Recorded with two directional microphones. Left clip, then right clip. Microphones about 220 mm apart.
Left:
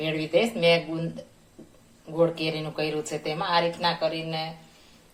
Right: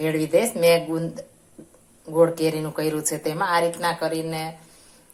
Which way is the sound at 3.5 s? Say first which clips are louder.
Right 1 dB; 40° right (ahead or behind).